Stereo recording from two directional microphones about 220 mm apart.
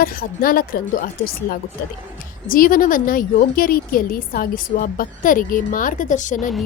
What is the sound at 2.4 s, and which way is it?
A woman's voice, 40° left (ahead or behind).